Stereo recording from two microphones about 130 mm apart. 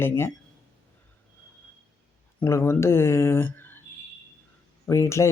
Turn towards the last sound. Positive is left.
turn(degrees=20)  # may be behind; listen again after turning